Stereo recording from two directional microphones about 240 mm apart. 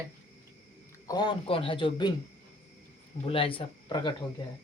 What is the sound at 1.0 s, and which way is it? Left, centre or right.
A man's voice, centre.